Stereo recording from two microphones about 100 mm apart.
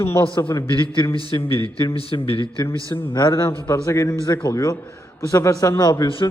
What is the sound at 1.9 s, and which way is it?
Speech, 60° left (ahead or behind).